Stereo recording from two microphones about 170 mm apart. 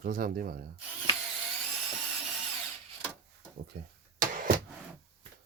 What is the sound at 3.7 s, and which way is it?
Speech, 65° right (ahead or behind).